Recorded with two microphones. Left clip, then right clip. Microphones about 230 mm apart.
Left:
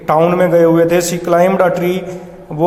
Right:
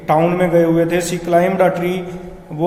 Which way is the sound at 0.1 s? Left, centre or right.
Left.